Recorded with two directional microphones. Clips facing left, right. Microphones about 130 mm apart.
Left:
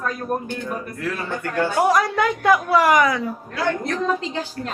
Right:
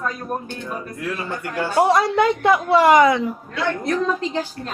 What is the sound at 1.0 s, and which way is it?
Speech, 15° right (ahead or behind).